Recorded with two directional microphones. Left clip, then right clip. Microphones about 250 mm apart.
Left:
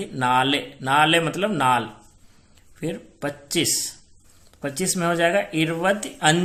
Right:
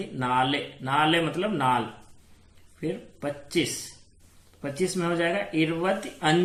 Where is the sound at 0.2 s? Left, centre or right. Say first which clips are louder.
Left 5 dB; left.